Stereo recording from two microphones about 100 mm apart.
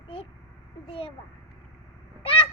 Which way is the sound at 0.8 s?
65° left (ahead or behind).